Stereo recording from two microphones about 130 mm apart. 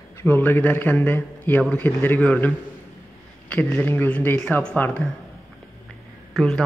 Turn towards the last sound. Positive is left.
turn(degrees=5)  # may be behind; listen again after turning